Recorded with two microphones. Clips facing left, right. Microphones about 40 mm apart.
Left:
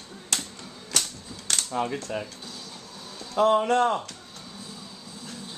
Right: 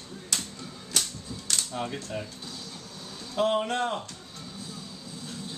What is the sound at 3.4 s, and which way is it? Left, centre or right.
Speech, left.